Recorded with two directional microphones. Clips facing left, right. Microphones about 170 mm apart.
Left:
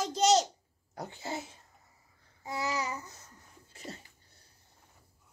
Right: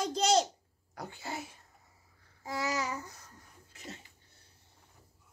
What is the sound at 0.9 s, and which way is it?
Speech, 20° left (ahead or behind).